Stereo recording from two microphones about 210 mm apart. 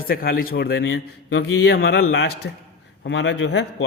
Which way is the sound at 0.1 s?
45° left (ahead or behind).